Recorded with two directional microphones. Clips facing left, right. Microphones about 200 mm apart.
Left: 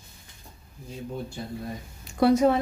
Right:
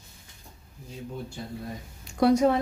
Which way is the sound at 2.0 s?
5° left (ahead or behind).